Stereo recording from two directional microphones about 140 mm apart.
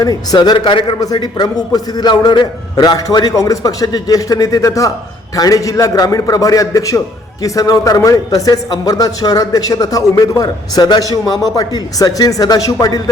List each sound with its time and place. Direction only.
0.0 s a man's voice: 30° left (ahead or behind)